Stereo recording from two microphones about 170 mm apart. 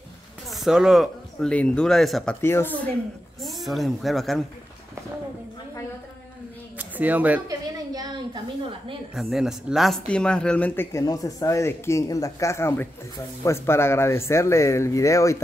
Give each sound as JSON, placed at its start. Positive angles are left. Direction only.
{"t": 0.5, "sound": "speech", "side_deg": 0}
{"t": 2.4, "sound": "speech", "side_deg": 15}
{"t": 3.3, "sound": "a woman's voice", "side_deg": 0}
{"t": 6.8, "sound": "speech", "side_deg": -10}
{"t": 7.4, "sound": "a sound", "side_deg": -20}
{"t": 9.1, "sound": "speech", "side_deg": 0}